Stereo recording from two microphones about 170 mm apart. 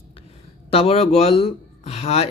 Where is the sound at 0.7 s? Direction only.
35° left (ahead or behind).